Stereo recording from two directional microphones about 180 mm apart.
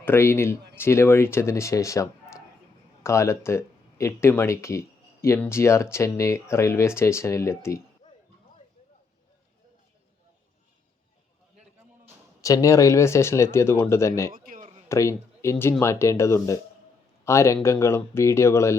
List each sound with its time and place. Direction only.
0.0 s speech: 15° left (ahead or behind)
12.4 s speech: 15° left (ahead or behind)
14.3 s speech: 50° right (ahead or behind)
14.6 s a sound: 35° right (ahead or behind)
14.8 s speech: 15° left (ahead or behind)